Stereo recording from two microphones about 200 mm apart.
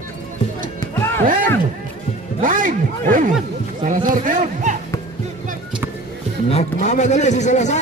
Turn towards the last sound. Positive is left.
turn(degrees=35)  # may be behind; listen again after turning